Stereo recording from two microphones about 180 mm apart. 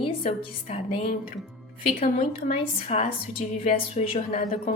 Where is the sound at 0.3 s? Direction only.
35° left (ahead or behind).